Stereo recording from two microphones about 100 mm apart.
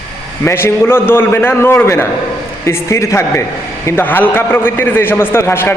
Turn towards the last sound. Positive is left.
turn(degrees=25)  # may be behind; listen again after turning